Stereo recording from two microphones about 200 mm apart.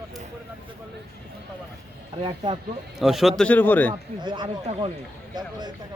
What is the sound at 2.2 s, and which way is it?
Speech, 25° right (ahead or behind).